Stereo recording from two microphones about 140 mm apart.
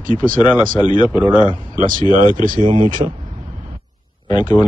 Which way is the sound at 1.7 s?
75° right (ahead or behind).